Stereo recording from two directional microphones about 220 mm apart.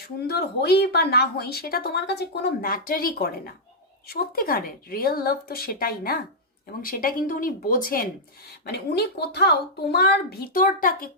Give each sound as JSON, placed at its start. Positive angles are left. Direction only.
{"t": 0.0, "sound": "a woman's voice", "side_deg": 45}